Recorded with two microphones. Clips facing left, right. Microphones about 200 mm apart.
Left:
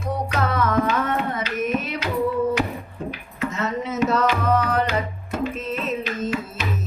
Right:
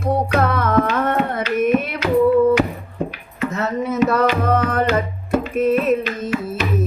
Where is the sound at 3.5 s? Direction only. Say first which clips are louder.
Right 5 dB; 60° right (ahead or behind).